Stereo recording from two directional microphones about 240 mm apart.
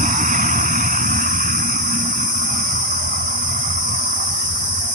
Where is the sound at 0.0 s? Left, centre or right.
Right.